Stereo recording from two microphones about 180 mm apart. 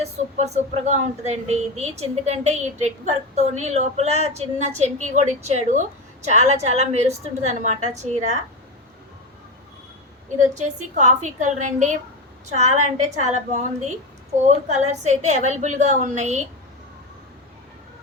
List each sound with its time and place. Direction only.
0.0 s speech: 40° right (ahead or behind)
10.5 s a woman's voice: 40° right (ahead or behind)
14.4 s speech: 40° right (ahead or behind)